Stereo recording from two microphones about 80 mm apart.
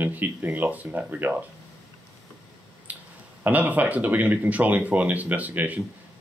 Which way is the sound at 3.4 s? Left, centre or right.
Centre.